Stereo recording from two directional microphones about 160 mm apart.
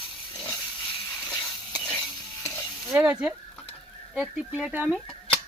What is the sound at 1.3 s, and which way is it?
Stir, 25° left (ahead or behind).